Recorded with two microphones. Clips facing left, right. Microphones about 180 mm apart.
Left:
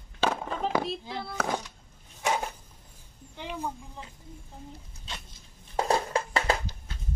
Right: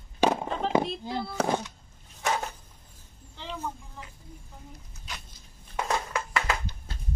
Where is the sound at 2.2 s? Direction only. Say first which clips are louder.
Left 1 dB; 10° left (ahead or behind).